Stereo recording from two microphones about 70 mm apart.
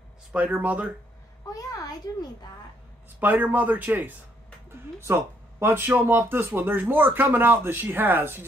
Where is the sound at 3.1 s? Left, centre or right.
Right.